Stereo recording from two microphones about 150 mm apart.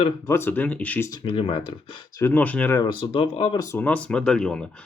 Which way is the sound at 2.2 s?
15° left (ahead or behind).